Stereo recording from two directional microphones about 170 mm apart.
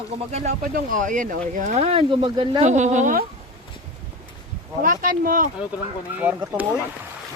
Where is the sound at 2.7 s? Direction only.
45° right (ahead or behind).